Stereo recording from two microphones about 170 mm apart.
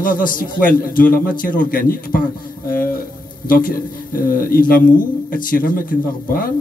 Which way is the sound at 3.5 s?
55° left (ahead or behind).